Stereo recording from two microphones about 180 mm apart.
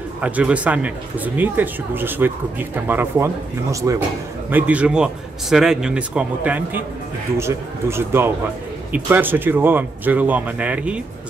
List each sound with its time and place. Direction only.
0.2 s speech: 5° right (ahead or behind)